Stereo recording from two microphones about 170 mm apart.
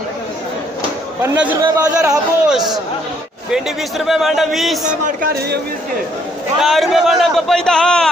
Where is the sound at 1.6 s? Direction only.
20° right (ahead or behind).